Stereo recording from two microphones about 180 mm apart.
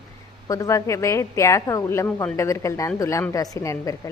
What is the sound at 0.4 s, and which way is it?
A woman's voice, 20° left (ahead or behind).